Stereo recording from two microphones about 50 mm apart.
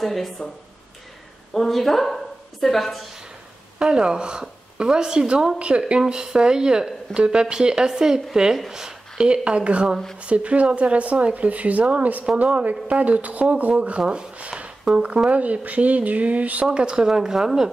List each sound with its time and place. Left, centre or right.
0.0 s speech: centre
1.5 s a woman's voice: centre
3.8 s speech: centre
16.6 s speech: centre